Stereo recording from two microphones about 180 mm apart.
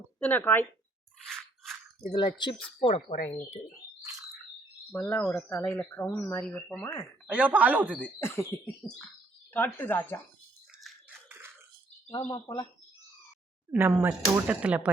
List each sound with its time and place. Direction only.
0.2 s speech: 10° left (ahead or behind)
1.3 s a sound: centre (ahead or behind)
2.0 s speech: 25° left (ahead or behind)
4.9 s speech: 10° left (ahead or behind)
7.3 s speech: 5° right (ahead or behind)
8.2 s speech: 15° left (ahead or behind)
8.8 s a sound: centre (ahead or behind)
9.5 s speech: 10° left (ahead or behind)
10.7 s a sound: centre (ahead or behind)
11.3 s bathtub: 15° right (ahead or behind)
12.1 s speech: 20° left (ahead or behind)
13.7 s speech: 10° right (ahead or behind)